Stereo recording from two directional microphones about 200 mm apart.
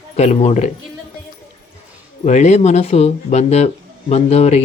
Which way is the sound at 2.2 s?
35° left (ahead or behind).